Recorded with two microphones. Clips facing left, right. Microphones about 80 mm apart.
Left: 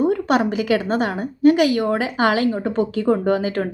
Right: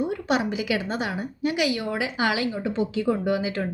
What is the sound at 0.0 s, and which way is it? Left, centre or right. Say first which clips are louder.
Speech: left 7 dB; left.